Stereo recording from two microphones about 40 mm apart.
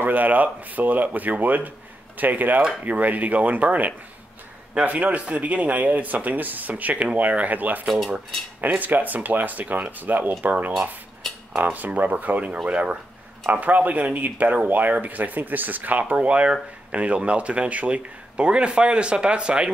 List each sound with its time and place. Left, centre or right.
0.0 s speech: right
11.5 s speech: right
12.6 s speech: right
13.5 s speech: right